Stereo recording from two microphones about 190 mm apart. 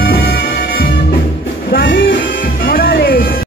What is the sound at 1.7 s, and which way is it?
Music, 50° left (ahead or behind).